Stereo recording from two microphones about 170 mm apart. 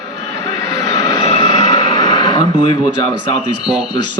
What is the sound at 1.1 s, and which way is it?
Vehicle, 35° left (ahead or behind).